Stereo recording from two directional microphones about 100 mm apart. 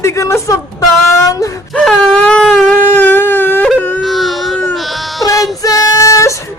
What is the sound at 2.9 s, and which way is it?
Wail, 20° left (ahead or behind).